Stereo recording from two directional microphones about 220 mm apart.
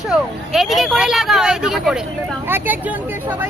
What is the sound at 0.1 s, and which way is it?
Speech, centre (ahead or behind).